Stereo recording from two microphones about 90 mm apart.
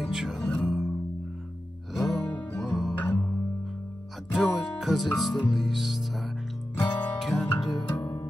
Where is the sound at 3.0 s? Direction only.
20° left (ahead or behind).